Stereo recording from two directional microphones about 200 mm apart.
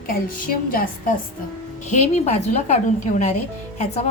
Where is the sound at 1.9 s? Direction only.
35° left (ahead or behind).